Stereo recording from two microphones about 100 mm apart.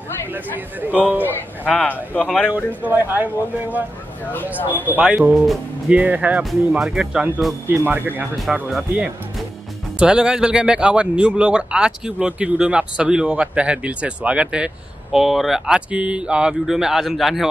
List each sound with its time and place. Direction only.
0.3 s speech: 15° right (ahead or behind)
1.2 s speech: 15° left (ahead or behind)
2.5 s speech: 15° right (ahead or behind)
4.2 s speech: 20° left (ahead or behind)
4.8 s speech: 15° right (ahead or behind)
7.6 s speech: 20° right (ahead or behind)
8.5 s speech: centre (ahead or behind)
9.9 s speech: 10° right (ahead or behind)